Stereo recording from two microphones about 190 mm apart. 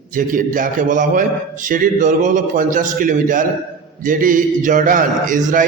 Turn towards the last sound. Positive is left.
turn(degrees=-45)  # may be behind; listen again after turning